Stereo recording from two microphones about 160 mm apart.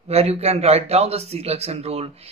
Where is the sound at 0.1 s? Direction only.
40° right (ahead or behind).